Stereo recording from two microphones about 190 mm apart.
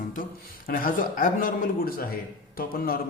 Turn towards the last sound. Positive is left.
turn(degrees=50)  # may be behind; listen again after turning